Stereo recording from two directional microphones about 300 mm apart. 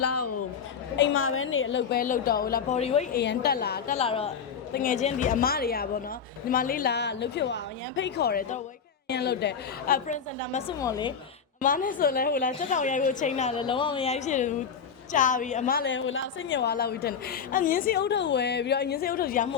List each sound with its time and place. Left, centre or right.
0.0 s a sound: left
0.9 s a woman's voice: left
3.9 s a woman's voice: centre
10.8 s a woman's voice: centre
11.6 s a woman's voice: left